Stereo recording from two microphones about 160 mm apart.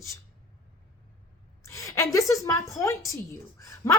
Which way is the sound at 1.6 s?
20° left (ahead or behind).